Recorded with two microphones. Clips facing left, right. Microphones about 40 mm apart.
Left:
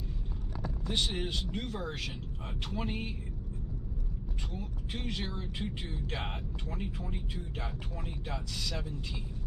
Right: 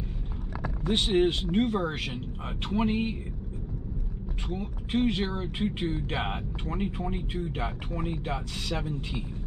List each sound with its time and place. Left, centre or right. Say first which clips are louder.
0.8 s speech: right 10 dB; right
4.5 s speech: right 11 dB; right